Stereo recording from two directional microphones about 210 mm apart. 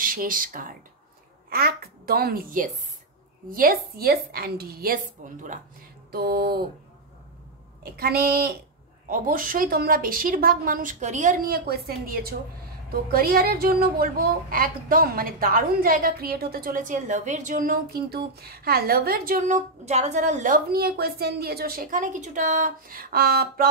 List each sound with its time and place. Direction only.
0.0 s a woman's voice: 40° right (ahead or behind)
7.8 s a woman's voice: 45° right (ahead or behind)